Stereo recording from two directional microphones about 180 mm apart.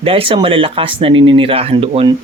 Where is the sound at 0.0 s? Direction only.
30° right (ahead or behind).